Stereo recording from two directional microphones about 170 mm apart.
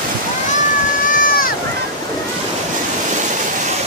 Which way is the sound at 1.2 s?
55° left (ahead or behind).